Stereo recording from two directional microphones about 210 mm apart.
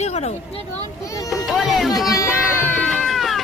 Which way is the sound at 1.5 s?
Centre (ahead or behind).